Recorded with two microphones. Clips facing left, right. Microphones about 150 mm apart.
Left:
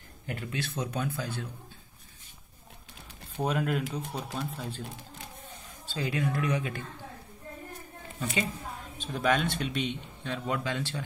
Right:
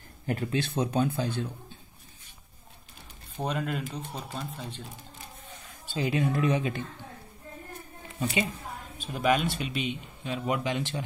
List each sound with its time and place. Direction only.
0.3 s speech: 40° right (ahead or behind)
0.6 s speech: 25° right (ahead or behind)
3.3 s speech: 5° left (ahead or behind)
5.9 s speech: 20° right (ahead or behind)
8.9 s speech: 5° right (ahead or behind)